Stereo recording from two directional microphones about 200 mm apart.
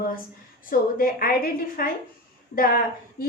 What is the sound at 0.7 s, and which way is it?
A woman's voice, 45° left (ahead or behind).